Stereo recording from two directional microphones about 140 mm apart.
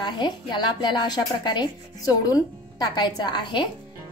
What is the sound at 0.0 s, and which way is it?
A woman's voice, 30° left (ahead or behind).